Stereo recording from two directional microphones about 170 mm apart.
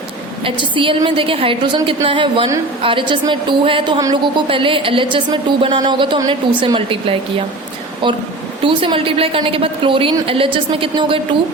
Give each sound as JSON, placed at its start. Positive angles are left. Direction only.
{"t": 0.4, "sound": "a woman's voice", "side_deg": -30}